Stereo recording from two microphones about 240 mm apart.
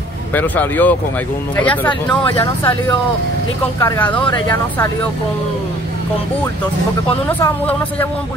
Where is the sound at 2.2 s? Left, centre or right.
Left.